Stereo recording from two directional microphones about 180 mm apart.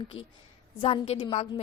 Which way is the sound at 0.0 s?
30° left (ahead or behind).